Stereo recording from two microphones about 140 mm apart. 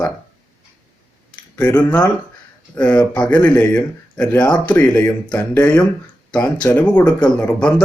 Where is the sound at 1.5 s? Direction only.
15° left (ahead or behind).